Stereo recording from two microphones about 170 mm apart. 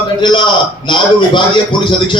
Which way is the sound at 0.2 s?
25° left (ahead or behind).